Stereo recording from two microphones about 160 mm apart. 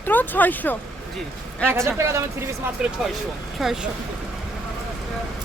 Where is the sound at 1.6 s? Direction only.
15° right (ahead or behind).